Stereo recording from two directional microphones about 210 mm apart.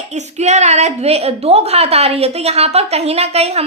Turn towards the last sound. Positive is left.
turn(degrees=-30)  # may be behind; listen again after turning